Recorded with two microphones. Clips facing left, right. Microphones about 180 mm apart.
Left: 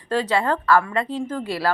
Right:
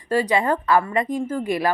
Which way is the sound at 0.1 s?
10° right (ahead or behind).